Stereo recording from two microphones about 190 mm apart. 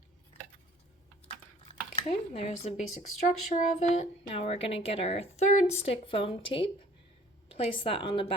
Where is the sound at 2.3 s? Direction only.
35° left (ahead or behind).